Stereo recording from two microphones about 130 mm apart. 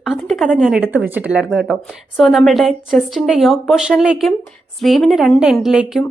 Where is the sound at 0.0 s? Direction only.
Centre (ahead or behind).